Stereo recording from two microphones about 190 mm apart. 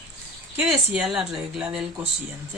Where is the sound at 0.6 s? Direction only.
5° right (ahead or behind).